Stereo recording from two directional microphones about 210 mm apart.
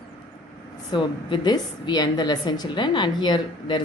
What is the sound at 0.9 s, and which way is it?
A woman's voice, 20° left (ahead or behind).